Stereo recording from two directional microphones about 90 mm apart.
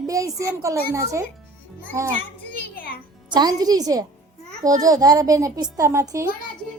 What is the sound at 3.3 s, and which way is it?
A woman's voice, 45° right (ahead or behind).